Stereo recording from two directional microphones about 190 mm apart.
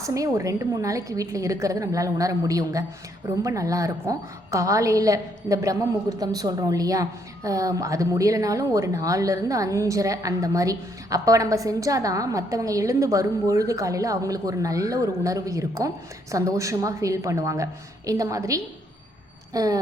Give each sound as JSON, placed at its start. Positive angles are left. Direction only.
{"t": 0.0, "sound": "a woman's voice", "side_deg": -15}